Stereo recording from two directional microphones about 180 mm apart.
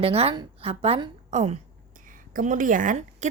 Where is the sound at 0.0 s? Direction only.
30° right (ahead or behind).